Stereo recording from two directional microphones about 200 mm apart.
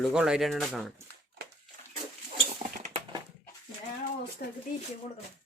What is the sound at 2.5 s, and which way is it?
Rodents, 30° right (ahead or behind).